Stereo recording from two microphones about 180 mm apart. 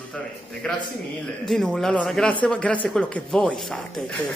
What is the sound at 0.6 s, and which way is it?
Speech, 5° left (ahead or behind).